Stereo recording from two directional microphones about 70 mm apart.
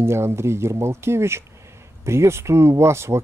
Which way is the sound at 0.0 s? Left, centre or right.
Right.